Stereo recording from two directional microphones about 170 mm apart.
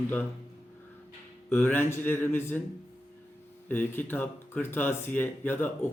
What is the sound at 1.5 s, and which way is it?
Speech, 10° left (ahead or behind).